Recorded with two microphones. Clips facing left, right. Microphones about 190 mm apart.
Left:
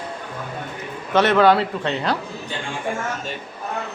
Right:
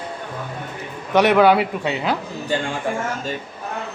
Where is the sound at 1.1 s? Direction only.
15° right (ahead or behind).